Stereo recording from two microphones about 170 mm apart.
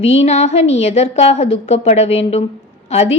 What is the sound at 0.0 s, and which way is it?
A woman's voice, 35° left (ahead or behind).